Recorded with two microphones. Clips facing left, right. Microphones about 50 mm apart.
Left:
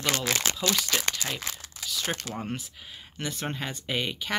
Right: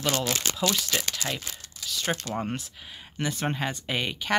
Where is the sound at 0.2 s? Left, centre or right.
Left.